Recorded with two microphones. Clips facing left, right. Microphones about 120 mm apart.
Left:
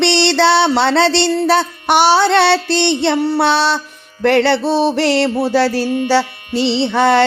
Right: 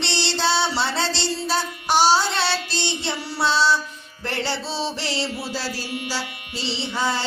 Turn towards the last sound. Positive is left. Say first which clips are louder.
# left 13 dB
turn(degrees=65)  # may be behind; listen again after turning